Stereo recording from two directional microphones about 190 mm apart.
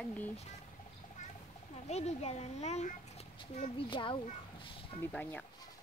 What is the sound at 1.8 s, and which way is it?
A child's voice, 35° left (ahead or behind).